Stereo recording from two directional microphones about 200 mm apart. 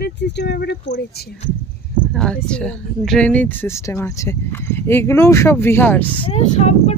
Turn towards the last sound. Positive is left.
turn(degrees=30)  # may be behind; listen again after turning